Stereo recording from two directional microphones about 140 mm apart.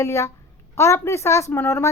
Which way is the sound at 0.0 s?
20° left (ahead or behind).